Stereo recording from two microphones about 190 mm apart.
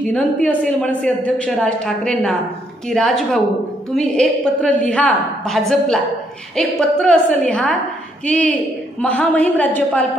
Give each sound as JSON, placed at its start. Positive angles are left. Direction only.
{"t": 0.0, "sound": "a woman's voice", "side_deg": 5}